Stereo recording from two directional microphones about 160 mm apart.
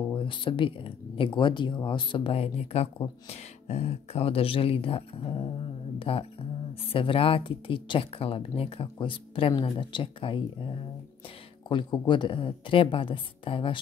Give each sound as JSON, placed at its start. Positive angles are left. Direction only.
{"t": 0.1, "sound": "speech", "side_deg": 30}
{"t": 11.7, "sound": "speech", "side_deg": 30}